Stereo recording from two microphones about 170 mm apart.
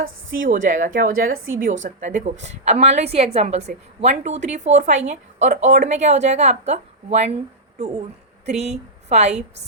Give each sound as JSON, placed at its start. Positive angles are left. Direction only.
{"t": 0.0, "sound": "a woman's voice", "side_deg": -55}
{"t": 8.4, "sound": "a woman's voice", "side_deg": -40}